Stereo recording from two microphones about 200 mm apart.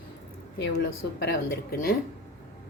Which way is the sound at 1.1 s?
50° left (ahead or behind).